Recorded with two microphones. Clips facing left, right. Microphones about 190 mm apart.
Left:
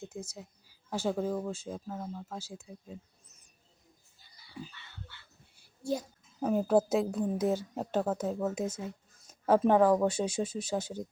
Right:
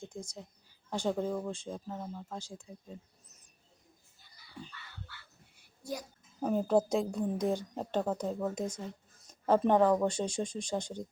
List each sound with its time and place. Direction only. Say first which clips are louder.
0.0 s speech: left 2 dB; 5° left (ahead or behind)
5.1 s a sound: right 2 dB; 25° left (ahead or behind)
5.8 s a child's voice: left 6 dB; 25° left (ahead or behind)
6.4 s speech: left 2 dB; 5° left (ahead or behind)